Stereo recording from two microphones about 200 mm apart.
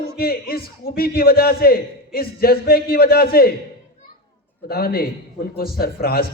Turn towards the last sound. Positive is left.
turn(degrees=50)  # may be behind; listen again after turning